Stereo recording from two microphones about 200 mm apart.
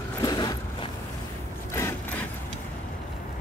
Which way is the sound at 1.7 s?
15° left (ahead or behind).